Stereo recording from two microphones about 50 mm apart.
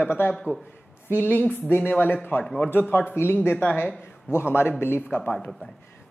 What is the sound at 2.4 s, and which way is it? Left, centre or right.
Speech, centre.